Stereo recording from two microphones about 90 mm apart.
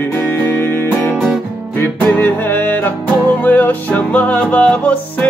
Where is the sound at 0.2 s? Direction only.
20° left (ahead or behind).